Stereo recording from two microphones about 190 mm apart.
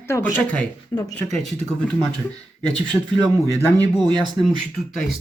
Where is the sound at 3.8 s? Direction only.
20° right (ahead or behind).